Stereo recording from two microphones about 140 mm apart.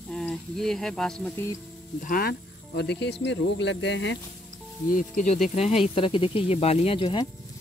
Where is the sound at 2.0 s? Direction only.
90° left.